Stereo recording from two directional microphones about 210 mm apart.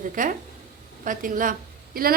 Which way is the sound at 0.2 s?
40° right (ahead or behind).